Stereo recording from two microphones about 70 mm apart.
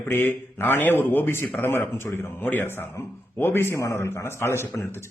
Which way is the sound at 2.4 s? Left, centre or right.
Left.